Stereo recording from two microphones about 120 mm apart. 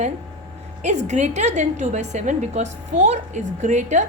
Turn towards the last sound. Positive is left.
turn(degrees=-80)